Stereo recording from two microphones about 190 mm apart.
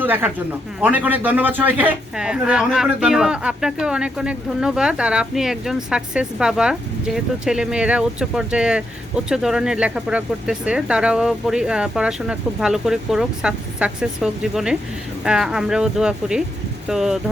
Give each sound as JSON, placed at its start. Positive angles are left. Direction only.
{"t": 0.0, "sound": "speech", "side_deg": -10}